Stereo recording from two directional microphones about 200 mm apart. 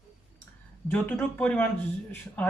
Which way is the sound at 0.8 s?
10° left (ahead or behind).